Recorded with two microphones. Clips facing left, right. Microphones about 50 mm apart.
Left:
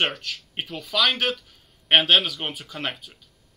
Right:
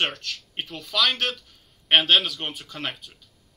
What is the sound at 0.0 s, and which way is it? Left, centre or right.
Speech, centre.